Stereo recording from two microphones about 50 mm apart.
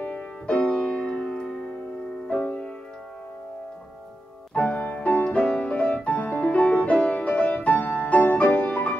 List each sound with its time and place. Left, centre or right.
0.0 s music: left
2.4 s music: left
4.6 s music: left